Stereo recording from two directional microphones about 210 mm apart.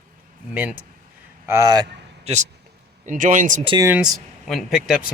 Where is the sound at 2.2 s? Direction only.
35° right (ahead or behind).